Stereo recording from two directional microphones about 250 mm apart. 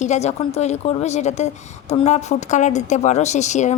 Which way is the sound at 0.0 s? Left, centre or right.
Left.